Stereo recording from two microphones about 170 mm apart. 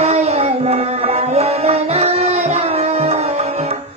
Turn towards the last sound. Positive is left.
turn(degrees=-35)  # may be behind; listen again after turning